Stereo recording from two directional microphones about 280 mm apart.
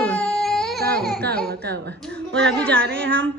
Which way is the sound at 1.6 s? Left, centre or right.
Right.